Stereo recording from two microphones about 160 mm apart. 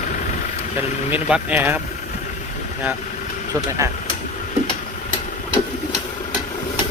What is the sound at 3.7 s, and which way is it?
Speech, 20° right (ahead or behind).